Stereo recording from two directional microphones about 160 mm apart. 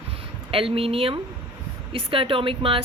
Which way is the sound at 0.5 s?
35° right (ahead or behind).